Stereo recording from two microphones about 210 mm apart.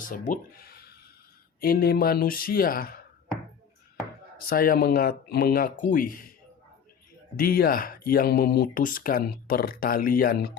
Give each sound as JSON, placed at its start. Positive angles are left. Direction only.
{"t": 0.1, "sound": "speech", "side_deg": 40}
{"t": 4.4, "sound": "speech", "side_deg": 45}
{"t": 7.3, "sound": "speech", "side_deg": 45}